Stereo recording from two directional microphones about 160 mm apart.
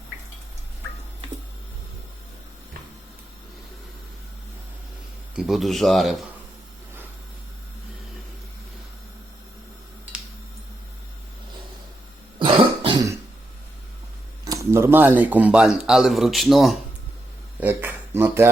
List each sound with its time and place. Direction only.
5.4 s speech: centre (ahead or behind)
12.4 s cough: 30° right (ahead or behind)
14.4 s speech: 20° right (ahead or behind); by 16.7 s centre (ahead or behind)
17.6 s a sound: 10° right (ahead or behind)